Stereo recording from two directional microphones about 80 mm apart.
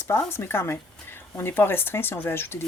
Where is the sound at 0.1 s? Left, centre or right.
Left.